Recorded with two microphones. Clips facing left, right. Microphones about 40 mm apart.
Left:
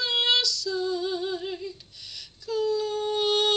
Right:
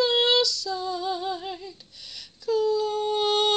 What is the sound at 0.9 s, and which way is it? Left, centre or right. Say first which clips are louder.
Humming: even; centre.